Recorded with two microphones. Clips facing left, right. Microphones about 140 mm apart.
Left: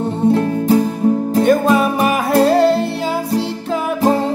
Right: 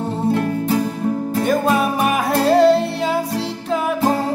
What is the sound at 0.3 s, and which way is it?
Music, 30° left (ahead or behind).